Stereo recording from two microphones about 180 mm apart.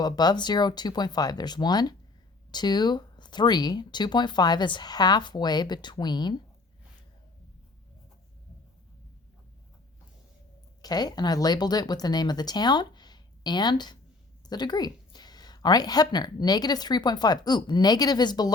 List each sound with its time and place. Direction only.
0.0 s speech: 20° left (ahead or behind)
10.8 s speech: 20° left (ahead or behind)